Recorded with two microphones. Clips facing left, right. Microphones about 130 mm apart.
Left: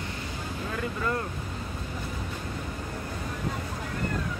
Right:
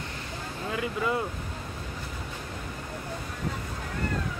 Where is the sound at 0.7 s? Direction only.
5° right (ahead or behind).